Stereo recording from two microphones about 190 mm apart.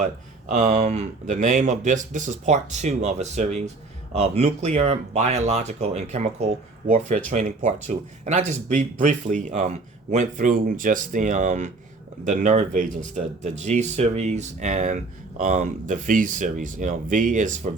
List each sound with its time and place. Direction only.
0.5 s speech: 40° right (ahead or behind)